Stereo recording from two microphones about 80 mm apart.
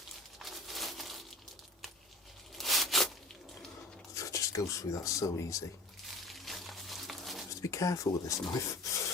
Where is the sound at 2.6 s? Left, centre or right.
Centre.